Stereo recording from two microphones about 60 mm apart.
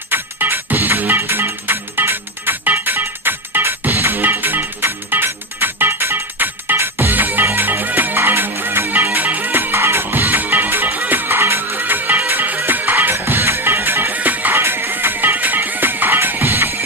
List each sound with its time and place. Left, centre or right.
0.1 s music: right
14.6 s music: right